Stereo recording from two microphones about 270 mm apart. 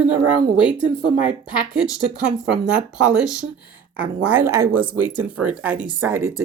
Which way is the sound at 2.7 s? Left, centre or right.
Centre.